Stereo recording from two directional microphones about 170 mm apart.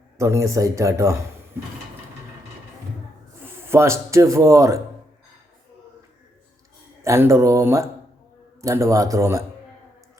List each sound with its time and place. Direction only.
0.2 s speech: 15° right (ahead or behind)
3.4 s speech: 15° right (ahead or behind)
7.0 s speech: 15° right (ahead or behind)